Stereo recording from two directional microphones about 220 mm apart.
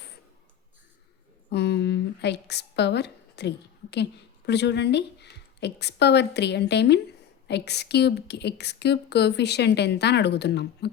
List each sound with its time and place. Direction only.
1.5 s a woman's voice: 50° left (ahead or behind)